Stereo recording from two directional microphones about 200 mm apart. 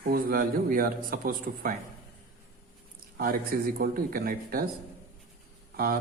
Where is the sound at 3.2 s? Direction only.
45° right (ahead or behind).